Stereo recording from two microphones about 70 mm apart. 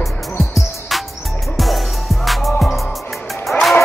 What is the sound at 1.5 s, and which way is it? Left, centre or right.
Music, centre.